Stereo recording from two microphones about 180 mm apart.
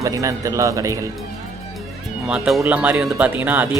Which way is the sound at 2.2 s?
5° right (ahead or behind).